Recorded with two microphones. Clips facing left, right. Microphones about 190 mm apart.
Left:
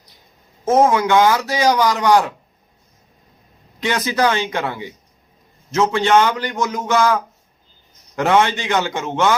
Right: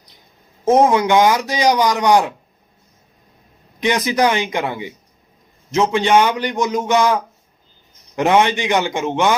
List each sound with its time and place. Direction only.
0.6 s a man's voice: 15° right (ahead or behind)
3.8 s a man's voice: 20° right (ahead or behind)